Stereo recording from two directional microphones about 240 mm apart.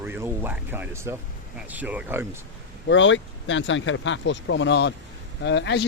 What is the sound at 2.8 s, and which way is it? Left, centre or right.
Speech, left.